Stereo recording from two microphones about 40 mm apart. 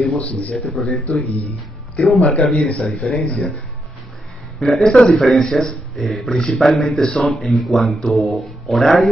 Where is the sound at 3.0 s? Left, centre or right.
Left.